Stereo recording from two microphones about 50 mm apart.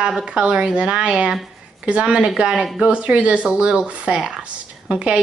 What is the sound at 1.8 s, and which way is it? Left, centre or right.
A woman's voice, right.